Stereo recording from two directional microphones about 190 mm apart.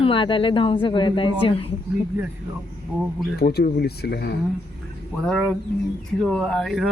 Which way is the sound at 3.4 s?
55° left (ahead or behind).